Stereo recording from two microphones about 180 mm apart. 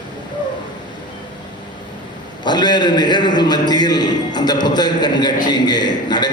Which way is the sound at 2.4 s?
25° left (ahead or behind).